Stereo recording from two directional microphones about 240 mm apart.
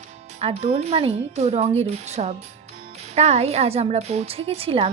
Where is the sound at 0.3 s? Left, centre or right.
Right.